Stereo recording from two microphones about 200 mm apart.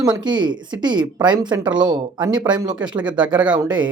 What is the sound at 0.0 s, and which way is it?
Speech, 20° right (ahead or behind).